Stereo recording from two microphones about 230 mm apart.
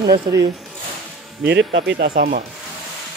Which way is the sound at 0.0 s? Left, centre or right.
Centre.